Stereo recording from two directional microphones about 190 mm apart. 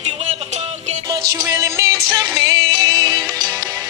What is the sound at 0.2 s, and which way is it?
Music, 35° right (ahead or behind).